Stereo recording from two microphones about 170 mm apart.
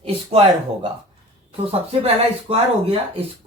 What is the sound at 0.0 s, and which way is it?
Speech, 35° right (ahead or behind).